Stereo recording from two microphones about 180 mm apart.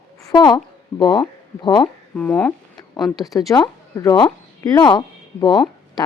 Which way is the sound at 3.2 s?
20° left (ahead or behind).